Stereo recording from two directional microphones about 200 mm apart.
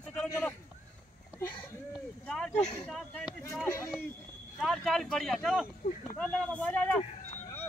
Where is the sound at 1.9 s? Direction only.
5° left (ahead or behind).